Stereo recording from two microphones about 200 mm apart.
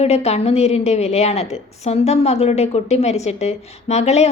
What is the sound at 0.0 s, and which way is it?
A woman's voice, 30° left (ahead or behind).